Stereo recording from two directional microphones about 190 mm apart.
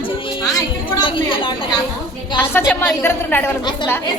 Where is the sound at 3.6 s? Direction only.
25° left (ahead or behind).